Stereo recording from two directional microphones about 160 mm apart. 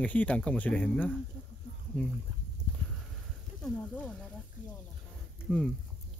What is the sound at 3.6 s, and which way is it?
Speech, 10° left (ahead or behind).